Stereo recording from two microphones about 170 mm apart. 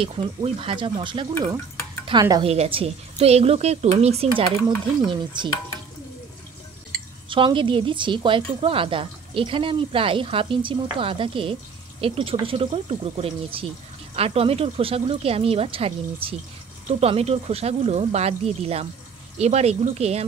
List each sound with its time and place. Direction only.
0.0 s a woman's voice: 30° right (ahead or behind)
2.4 s a woman's voice: 35° right (ahead or behind)
7.2 s a woman's voice: 30° right (ahead or behind)